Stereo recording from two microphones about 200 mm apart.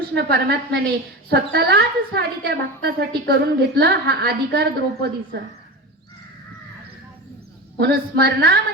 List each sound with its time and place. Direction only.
0.1 s speech: 55° right (ahead or behind)
7.8 s speech: 50° right (ahead or behind)